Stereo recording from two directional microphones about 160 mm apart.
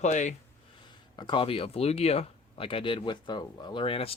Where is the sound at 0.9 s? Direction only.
30° left (ahead or behind).